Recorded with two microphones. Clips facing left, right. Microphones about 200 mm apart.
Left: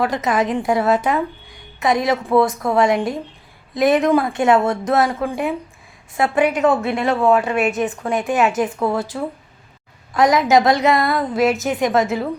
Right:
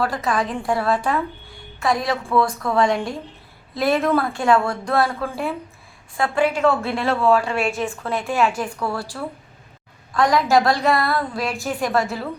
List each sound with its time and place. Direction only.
0.0 s a woman's voice: 20° left (ahead or behind)